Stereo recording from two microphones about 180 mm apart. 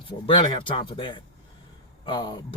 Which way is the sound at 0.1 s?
25° left (ahead or behind).